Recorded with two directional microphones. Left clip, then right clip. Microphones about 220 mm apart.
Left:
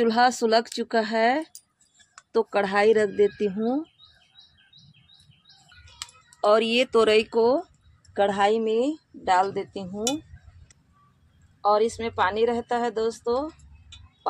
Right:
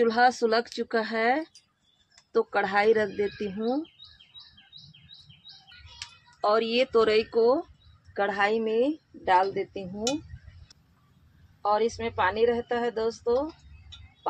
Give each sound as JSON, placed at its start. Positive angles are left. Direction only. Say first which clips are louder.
{"t": 0.0, "sound": "a woman's voice", "louder": "left 1 dB", "side_deg": 45}
{"t": 6.4, "sound": "a woman's voice", "louder": "left 4 dB", "side_deg": 45}
{"t": 11.6, "sound": "a woman's voice", "louder": "left 4 dB", "side_deg": 35}